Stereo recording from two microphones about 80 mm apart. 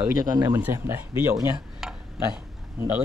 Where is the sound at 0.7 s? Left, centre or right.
Right.